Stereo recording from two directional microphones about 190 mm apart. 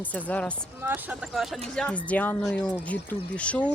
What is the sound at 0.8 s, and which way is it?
Speech, 10° right (ahead or behind).